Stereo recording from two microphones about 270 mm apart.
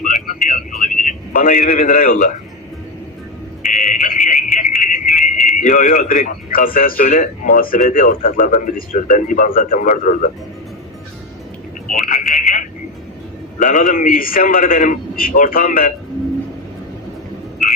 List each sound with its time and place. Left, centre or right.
0.0 s a sound: left
0.4 s a man's voice: left
3.8 s music: centre
5.0 s a sound: centre
5.5 s a man's voice: left
11.9 s a man's voice: left